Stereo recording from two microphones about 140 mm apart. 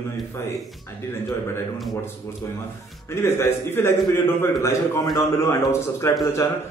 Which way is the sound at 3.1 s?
20° left (ahead or behind).